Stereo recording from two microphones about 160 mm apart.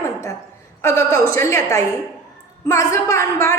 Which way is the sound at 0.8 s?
15° left (ahead or behind).